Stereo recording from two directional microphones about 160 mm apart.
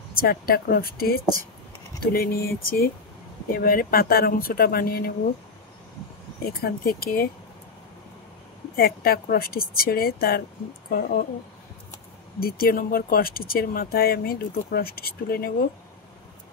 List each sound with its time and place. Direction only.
0.1 s speech: 65° left (ahead or behind)
6.4 s speech: 70° left (ahead or behind)
8.7 s speech: 70° left (ahead or behind)
12.4 s speech: 70° left (ahead or behind)